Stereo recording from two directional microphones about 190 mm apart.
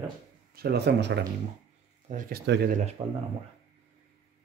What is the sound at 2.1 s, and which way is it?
Speech, 45° right (ahead or behind).